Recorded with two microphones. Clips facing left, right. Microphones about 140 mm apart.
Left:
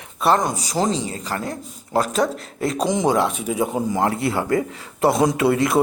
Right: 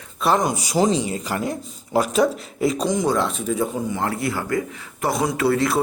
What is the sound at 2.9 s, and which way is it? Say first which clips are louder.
Speech: left 2 dB; 20° left (ahead or behind).